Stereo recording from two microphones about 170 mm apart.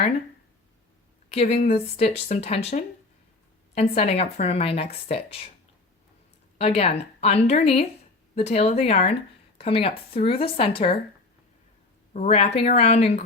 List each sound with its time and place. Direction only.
1.3 s speech: 35° left (ahead or behind)
6.6 s speech: 35° left (ahead or behind)
12.1 s speech: 40° left (ahead or behind)